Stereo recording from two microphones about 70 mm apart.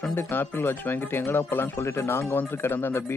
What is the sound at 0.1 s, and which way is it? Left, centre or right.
Speech, left.